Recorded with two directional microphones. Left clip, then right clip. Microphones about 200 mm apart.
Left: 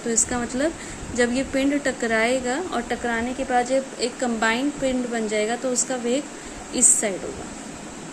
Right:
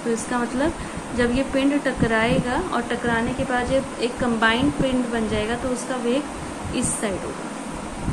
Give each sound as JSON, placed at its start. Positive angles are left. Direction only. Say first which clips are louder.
{"t": 0.1, "sound": "speech", "louder": "right 1 dB", "side_deg": 35}